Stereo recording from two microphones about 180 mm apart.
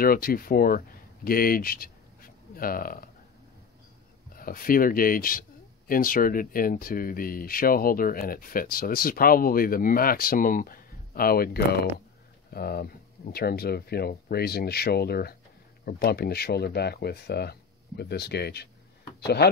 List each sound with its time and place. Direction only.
0.0 s speech: 55° left (ahead or behind)
4.4 s speech: 55° left (ahead or behind)